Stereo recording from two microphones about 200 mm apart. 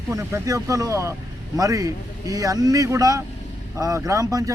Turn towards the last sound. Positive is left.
turn(degrees=-15)  # may be behind; listen again after turning